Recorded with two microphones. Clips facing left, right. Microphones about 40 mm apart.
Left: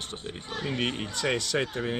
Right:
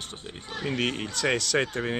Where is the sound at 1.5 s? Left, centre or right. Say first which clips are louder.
Right 4 dB; right.